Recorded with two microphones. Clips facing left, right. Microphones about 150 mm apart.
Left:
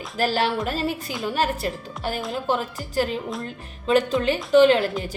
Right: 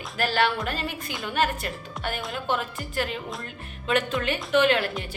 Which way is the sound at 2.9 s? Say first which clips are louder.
Left 6 dB; 35° left (ahead or behind).